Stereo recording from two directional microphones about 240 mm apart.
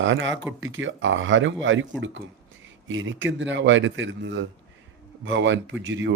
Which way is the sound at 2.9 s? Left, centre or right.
Right.